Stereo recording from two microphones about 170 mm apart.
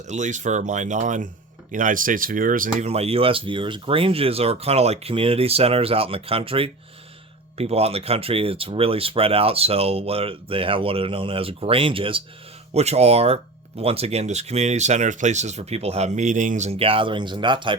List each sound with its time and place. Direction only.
0.0 s speech: 45° right (ahead or behind)
2.8 s speech: 35° right (ahead or behind)